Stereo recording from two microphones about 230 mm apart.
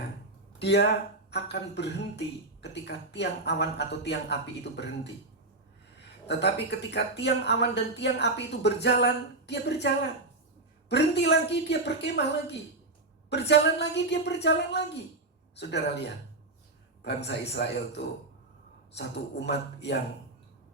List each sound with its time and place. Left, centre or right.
0.6 s speech: left
6.2 s speech: left
17.2 s speech: left